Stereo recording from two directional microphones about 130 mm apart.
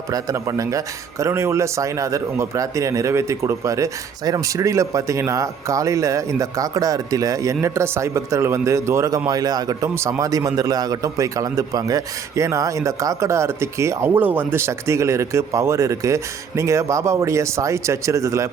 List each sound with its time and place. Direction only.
0.1 s a man's voice: 25° right (ahead or behind)